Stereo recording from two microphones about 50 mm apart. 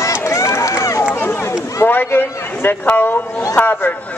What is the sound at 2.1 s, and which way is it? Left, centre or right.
Speech, left.